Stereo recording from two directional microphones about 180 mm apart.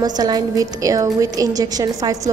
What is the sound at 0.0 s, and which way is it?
A woman's voice, 20° right (ahead or behind).